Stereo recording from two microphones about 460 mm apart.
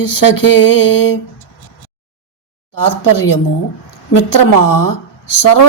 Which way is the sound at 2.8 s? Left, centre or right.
Left.